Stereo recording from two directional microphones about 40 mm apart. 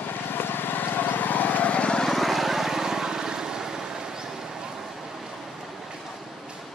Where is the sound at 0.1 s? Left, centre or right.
Left.